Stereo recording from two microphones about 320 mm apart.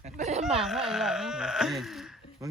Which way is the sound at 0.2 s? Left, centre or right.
Right.